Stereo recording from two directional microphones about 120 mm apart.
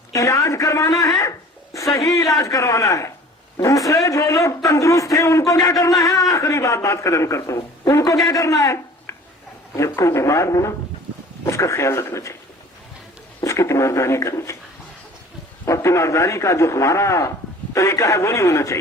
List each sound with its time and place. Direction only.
0.1 s a man's voice: 25° left (ahead or behind)
13.4 s a man's voice: 25° left (ahead or behind)
15.6 s a man's voice: 25° left (ahead or behind)